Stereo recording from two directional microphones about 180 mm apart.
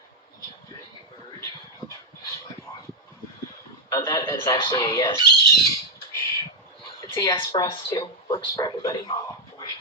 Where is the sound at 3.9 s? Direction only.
20° left (ahead or behind).